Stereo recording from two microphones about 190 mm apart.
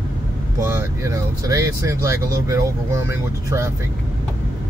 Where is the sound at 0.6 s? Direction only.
15° right (ahead or behind).